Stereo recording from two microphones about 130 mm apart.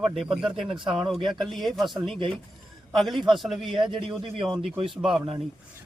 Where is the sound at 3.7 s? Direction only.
40° right (ahead or behind).